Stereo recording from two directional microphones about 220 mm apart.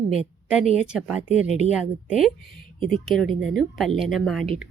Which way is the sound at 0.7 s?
5° right (ahead or behind).